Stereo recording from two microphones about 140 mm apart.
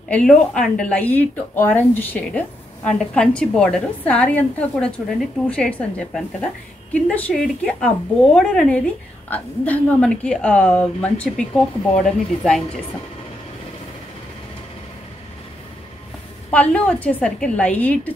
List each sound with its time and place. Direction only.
0.1 s speech: 5° left (ahead or behind)
16.4 s speech: 10° left (ahead or behind)